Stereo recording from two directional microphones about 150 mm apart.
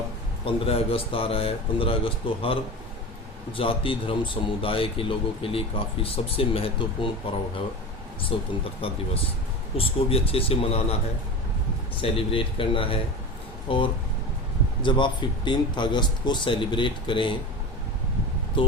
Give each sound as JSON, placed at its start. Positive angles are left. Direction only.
{"t": 0.4, "sound": "speech", "side_deg": 40}
{"t": 12.1, "sound": "speech", "side_deg": 35}
{"t": 18.5, "sound": "speech", "side_deg": 35}